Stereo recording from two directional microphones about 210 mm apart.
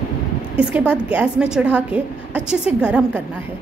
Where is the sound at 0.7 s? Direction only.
5° right (ahead or behind).